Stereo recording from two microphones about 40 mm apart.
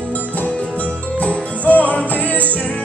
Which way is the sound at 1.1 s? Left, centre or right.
Left.